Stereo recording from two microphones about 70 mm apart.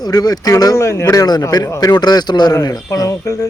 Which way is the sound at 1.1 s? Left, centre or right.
Left.